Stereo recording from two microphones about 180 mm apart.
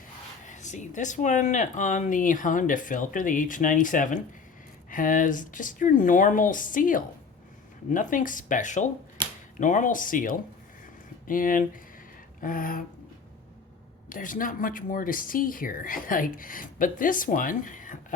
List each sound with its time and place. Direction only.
0.4 s speech: 45° left (ahead or behind)
14.1 s speech: 50° left (ahead or behind)